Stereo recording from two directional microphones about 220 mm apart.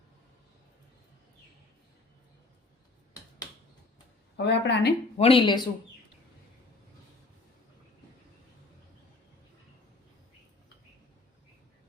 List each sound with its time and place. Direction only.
4.4 s speech: 50° left (ahead or behind)
5.1 s speech: 25° left (ahead or behind)